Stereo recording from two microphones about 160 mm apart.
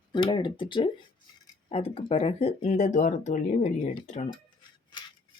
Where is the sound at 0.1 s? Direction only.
30° left (ahead or behind); by 4.3 s 45° left (ahead or behind).